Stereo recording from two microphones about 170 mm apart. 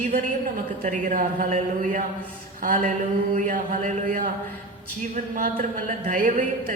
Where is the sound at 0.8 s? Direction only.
50° right (ahead or behind).